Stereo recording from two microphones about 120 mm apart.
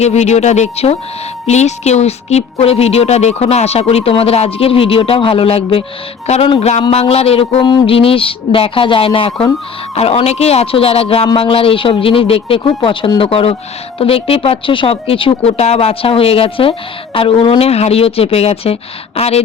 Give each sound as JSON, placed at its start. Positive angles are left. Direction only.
{"t": 0.0, "sound": "a woman's voice", "side_deg": 70}
{"t": 6.2, "sound": "a woman's voice", "side_deg": 60}
{"t": 7.6, "sound": "a sound", "side_deg": 35}
{"t": 7.9, "sound": "speech", "side_deg": 50}
{"t": 9.9, "sound": "a woman's voice", "side_deg": 60}